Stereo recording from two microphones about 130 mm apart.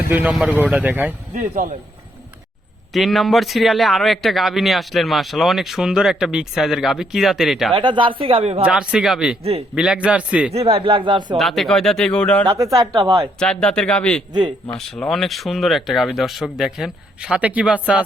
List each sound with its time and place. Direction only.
0.1 s speech: 5° right (ahead or behind)
2.9 s a man's voice: centre (ahead or behind)
7.7 s speech: 40° right (ahead or behind)
8.6 s a man's voice: 5° right (ahead or behind)
9.4 s speech: 50° right (ahead or behind)
9.7 s speech: 5° right (ahead or behind)
10.5 s speech: 50° right (ahead or behind)
11.3 s a man's voice: centre (ahead or behind)
12.5 s a woman's voice: 25° right (ahead or behind)
13.4 s a man's voice: 5° left (ahead or behind)